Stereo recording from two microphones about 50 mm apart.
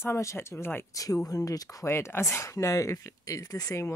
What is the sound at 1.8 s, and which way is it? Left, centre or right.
Speech, left.